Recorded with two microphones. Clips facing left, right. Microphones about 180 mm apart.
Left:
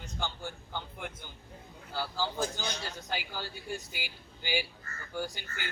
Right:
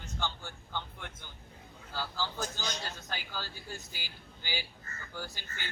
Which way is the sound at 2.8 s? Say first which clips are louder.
Left 4 dB; 15° left (ahead or behind).